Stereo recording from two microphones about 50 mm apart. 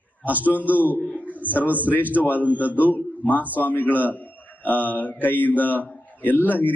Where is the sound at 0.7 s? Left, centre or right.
Left.